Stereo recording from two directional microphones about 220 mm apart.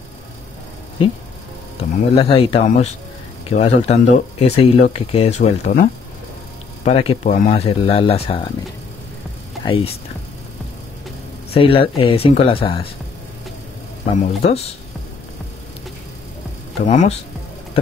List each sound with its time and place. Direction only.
2.1 s speech: 25° left (ahead or behind)
9.7 s speech: 25° left (ahead or behind)
11.5 s speech: 25° left (ahead or behind)
14.1 s speech: 30° left (ahead or behind)
16.8 s speech: 35° left (ahead or behind)